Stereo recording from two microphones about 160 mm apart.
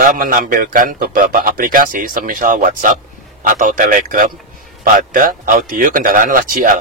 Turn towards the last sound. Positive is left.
turn(degrees=-65)  # may be behind; listen again after turning